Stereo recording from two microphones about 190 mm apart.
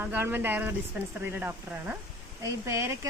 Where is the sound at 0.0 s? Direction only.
10° right (ahead or behind).